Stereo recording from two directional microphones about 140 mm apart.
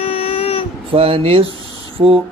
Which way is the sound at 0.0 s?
45° left (ahead or behind).